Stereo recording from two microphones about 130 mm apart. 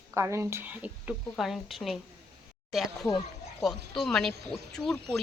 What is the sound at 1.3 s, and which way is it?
Speech, centre (ahead or behind).